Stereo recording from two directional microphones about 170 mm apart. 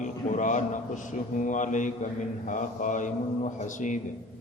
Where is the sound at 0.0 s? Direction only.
45° left (ahead or behind).